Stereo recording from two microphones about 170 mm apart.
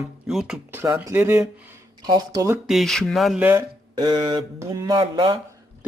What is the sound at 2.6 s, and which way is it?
Speech, centre (ahead or behind).